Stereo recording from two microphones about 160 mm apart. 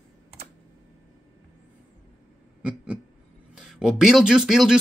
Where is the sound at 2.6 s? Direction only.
5° right (ahead or behind).